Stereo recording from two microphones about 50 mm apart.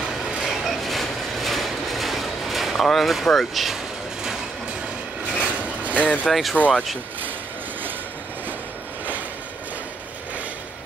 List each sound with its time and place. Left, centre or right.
0.4 s train: centre
3.3 s vehicle: centre
5.4 s a sound: right
6.2 s speech: centre
6.5 s speech: left